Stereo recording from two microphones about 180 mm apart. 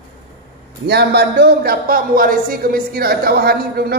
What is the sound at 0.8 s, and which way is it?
A man's voice, 65° right (ahead or behind).